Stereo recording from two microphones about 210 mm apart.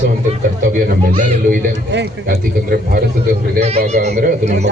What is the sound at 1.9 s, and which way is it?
A man's voice, 50° right (ahead or behind).